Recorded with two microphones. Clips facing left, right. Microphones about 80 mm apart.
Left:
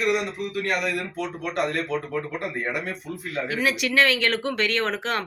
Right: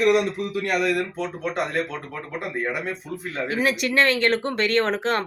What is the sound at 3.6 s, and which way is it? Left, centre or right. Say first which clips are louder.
Speech: right 1 dB; right.